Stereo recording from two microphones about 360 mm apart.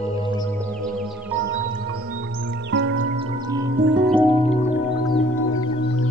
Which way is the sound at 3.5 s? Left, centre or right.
Centre.